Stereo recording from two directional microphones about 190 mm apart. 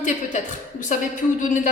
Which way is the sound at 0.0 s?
40° left (ahead or behind).